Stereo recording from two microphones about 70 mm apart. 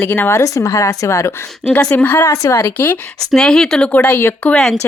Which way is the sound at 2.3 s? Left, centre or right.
Left.